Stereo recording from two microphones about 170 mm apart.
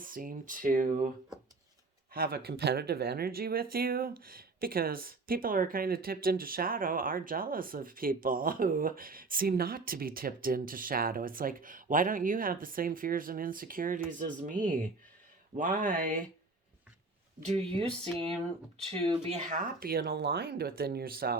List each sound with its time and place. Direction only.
0.0 s speech: 55° right (ahead or behind)
2.1 s speech: 60° right (ahead or behind)
17.4 s speech: 35° right (ahead or behind); by 21.3 s 60° right (ahead or behind)